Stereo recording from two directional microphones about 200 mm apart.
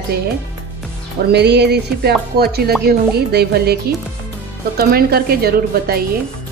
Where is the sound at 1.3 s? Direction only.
55° right (ahead or behind).